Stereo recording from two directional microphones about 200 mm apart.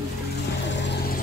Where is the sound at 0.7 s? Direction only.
60° left (ahead or behind).